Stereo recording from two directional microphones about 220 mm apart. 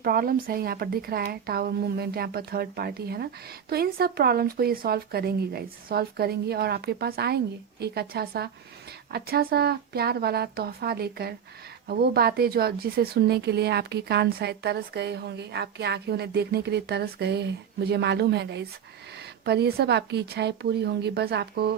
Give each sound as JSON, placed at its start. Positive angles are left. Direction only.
{"t": 0.0, "sound": "a woman's voice", "side_deg": -40}